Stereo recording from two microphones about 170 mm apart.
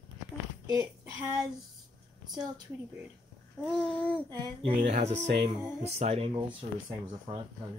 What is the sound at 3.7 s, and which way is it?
Babbling, 5° left (ahead or behind).